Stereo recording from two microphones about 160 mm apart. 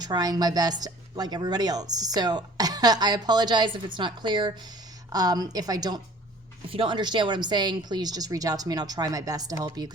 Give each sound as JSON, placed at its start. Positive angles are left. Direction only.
{"t": 0.0, "sound": "speech", "side_deg": -25}